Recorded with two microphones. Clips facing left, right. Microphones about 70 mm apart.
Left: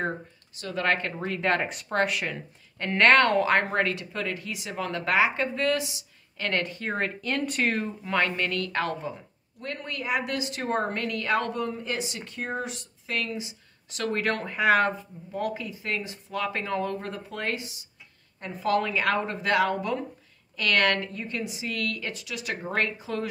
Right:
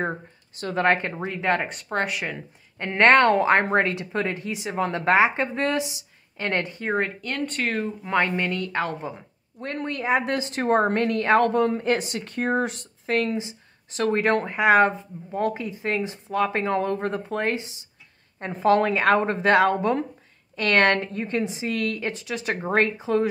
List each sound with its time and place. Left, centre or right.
0.6 s speech: right
0.8 s speech: right
1.4 s speech: centre
7.2 s speech: centre
8.0 s a woman's voice: centre
9.6 s speech: right
11.6 s speech: right